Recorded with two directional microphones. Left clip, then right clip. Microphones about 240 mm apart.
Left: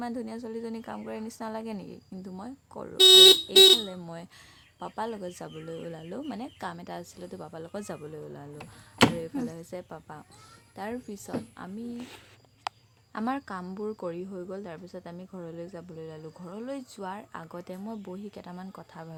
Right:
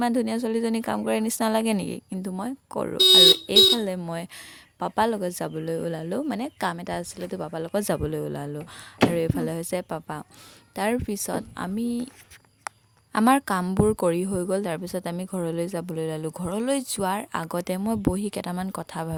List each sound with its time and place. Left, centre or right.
0.0 s a woman's voice: right
13.1 s a woman's voice: right